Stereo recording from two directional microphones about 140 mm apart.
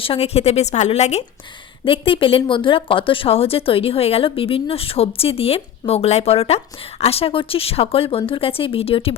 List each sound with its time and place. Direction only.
0.0 s speech: 45° left (ahead or behind)
1.8 s speech: 40° left (ahead or behind)